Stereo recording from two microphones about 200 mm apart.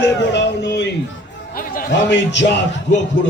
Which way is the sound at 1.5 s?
45° left (ahead or behind).